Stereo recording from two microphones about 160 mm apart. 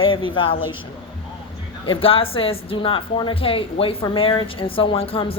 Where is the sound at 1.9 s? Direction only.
35° left (ahead or behind).